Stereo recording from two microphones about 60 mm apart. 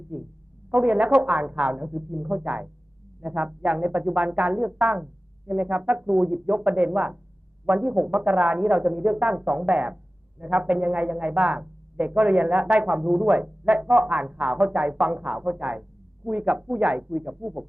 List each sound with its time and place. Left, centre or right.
0.1 s speech: right